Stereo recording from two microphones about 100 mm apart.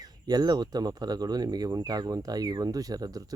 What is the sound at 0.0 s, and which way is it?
Speech, 40° right (ahead or behind).